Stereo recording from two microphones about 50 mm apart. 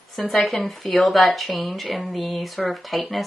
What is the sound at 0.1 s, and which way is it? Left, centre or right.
Speech, centre.